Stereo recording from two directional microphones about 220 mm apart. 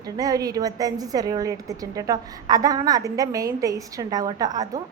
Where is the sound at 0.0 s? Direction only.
15° right (ahead or behind).